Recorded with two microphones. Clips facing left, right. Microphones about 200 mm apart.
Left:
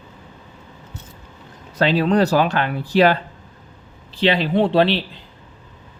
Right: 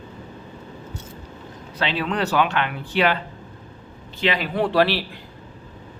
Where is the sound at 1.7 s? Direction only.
40° left (ahead or behind); by 5.1 s 20° left (ahead or behind).